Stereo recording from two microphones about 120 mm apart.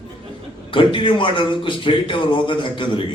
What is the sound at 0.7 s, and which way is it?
A man's voice, 45° left (ahead or behind).